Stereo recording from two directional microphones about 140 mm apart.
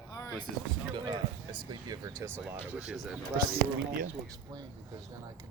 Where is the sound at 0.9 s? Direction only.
35° right (ahead or behind).